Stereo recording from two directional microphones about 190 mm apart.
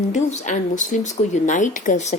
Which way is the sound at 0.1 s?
40° left (ahead or behind).